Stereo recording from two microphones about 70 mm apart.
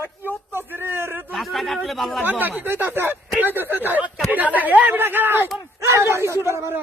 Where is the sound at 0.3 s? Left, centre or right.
Right.